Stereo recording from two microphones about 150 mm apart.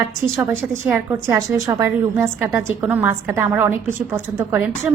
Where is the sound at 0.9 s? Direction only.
10° right (ahead or behind).